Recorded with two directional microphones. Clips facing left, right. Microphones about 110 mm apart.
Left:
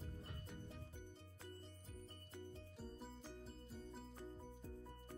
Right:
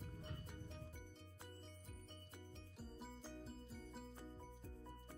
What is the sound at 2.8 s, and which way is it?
Music, centre (ahead or behind).